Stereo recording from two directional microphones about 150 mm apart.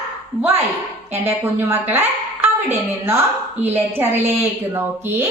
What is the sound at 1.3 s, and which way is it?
Speech, 15° right (ahead or behind).